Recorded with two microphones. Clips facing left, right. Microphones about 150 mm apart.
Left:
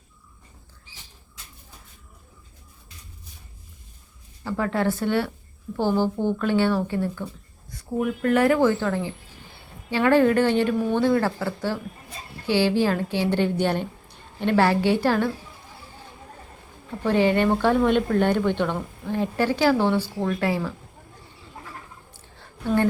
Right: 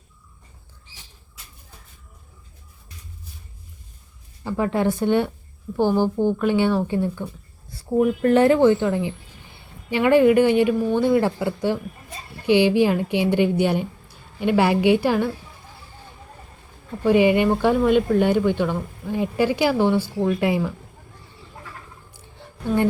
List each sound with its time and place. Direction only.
4.4 s speech: 15° right (ahead or behind)
8.0 s speech: 30° right (ahead or behind)
17.0 s speech: 10° right (ahead or behind)
22.4 s a sound: 15° right (ahead or behind)